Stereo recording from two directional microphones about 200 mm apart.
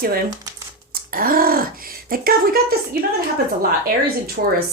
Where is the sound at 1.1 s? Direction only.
45° right (ahead or behind).